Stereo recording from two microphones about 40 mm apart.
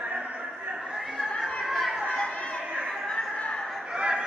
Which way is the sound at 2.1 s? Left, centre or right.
Left.